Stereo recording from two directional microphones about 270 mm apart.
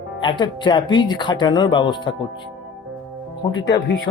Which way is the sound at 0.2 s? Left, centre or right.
Centre.